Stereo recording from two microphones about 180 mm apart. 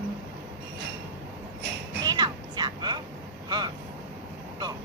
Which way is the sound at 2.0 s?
25° right (ahead or behind).